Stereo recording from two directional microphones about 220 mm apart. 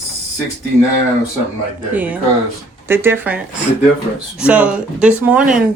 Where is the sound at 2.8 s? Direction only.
10° right (ahead or behind).